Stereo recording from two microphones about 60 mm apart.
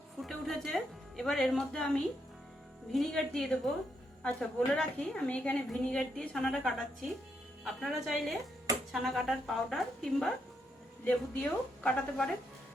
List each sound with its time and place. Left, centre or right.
0.2 s a woman's voice: centre
7.6 s a woman's voice: centre
11.0 s a woman's voice: left